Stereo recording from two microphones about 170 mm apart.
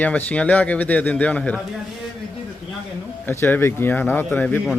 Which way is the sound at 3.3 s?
10° left (ahead or behind).